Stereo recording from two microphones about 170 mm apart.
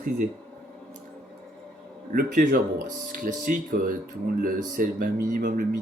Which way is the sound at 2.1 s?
50° right (ahead or behind).